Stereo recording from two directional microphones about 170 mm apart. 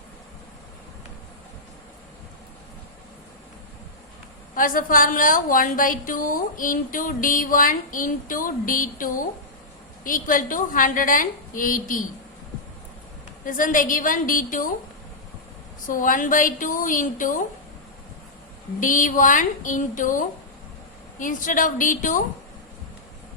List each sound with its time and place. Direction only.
4.5 s a woman's voice: 55° left (ahead or behind)
13.4 s a woman's voice: 50° left (ahead or behind)
15.9 s a woman's voice: 50° left (ahead or behind)
18.8 s a woman's voice: 50° left (ahead or behind)